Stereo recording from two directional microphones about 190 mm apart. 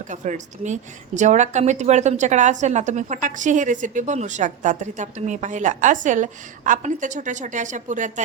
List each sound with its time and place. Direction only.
0.1 s a woman's voice: 40° right (ahead or behind)